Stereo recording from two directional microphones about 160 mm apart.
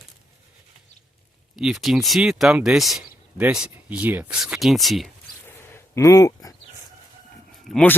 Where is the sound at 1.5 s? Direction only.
Centre (ahead or behind).